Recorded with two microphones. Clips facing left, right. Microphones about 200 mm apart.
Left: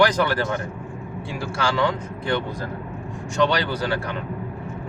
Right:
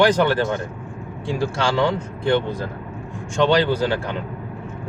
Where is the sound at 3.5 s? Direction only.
25° right (ahead or behind).